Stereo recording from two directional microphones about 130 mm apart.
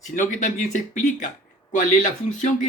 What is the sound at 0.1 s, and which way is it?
Speech, 85° left.